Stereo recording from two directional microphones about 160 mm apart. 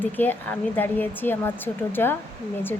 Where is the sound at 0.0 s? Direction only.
10° left (ahead or behind).